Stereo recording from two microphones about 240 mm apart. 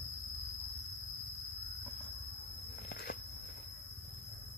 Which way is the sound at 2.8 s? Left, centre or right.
Left.